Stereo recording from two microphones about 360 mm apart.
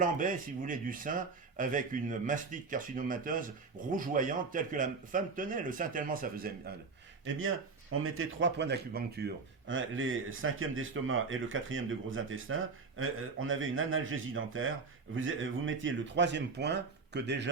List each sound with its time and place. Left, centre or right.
0.0 s speech: right
7.3 s speech: right